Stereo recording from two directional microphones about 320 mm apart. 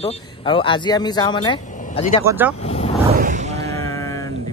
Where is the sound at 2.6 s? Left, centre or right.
Centre.